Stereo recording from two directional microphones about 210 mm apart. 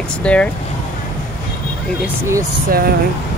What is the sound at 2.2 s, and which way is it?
Speech, 15° right (ahead or behind).